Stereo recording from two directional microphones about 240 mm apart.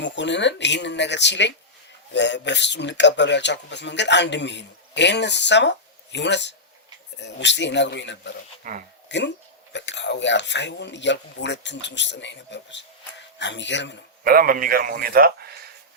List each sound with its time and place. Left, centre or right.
0.0 s speech: left
8.7 s speech: right
9.0 s speech: left
14.3 s a man's voice: right